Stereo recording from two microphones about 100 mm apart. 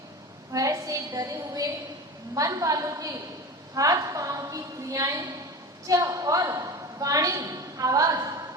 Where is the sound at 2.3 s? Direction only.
35° right (ahead or behind).